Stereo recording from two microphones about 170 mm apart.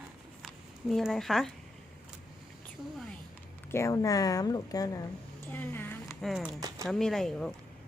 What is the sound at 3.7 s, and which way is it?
Speech, 20° left (ahead or behind).